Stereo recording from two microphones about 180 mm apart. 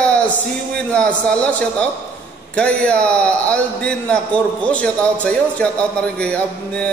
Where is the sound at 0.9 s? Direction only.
5° left (ahead or behind).